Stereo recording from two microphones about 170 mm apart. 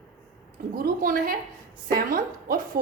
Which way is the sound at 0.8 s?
55° right (ahead or behind).